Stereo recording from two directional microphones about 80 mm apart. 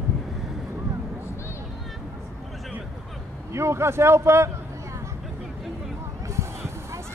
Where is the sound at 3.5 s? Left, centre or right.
Right.